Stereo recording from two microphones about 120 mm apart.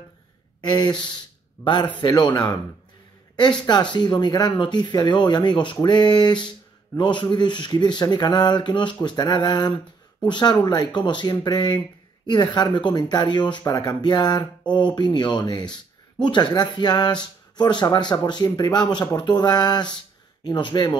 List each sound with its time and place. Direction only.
0.6 s speech: 40° left (ahead or behind)